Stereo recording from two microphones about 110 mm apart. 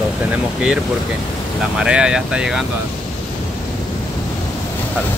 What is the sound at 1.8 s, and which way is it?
Speech, 10° right (ahead or behind).